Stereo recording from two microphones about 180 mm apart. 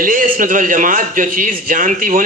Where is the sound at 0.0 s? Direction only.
50° right (ahead or behind).